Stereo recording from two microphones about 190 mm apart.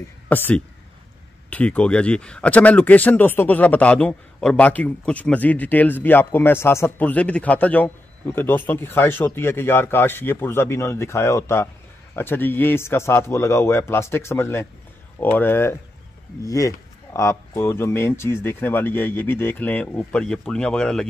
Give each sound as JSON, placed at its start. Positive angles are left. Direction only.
{"t": 0.3, "sound": "speech", "side_deg": 10}